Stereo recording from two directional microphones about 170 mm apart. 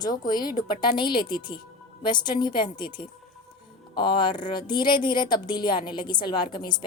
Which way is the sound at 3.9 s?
25° left (ahead or behind).